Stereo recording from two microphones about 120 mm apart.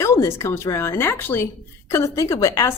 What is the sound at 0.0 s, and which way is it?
A woman's voice, 25° left (ahead or behind).